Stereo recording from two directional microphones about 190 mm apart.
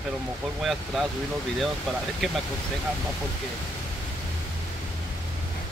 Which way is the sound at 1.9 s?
Centre (ahead or behind).